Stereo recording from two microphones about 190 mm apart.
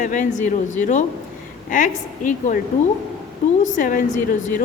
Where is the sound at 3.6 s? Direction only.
40° left (ahead or behind).